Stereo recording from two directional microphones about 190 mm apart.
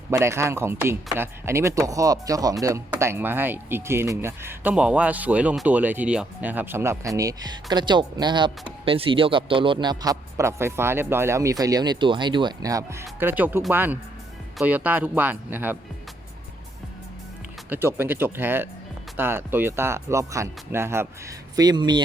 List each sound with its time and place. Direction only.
0.1 s a man's voice: 15° right (ahead or behind)
17.7 s speech: 10° right (ahead or behind)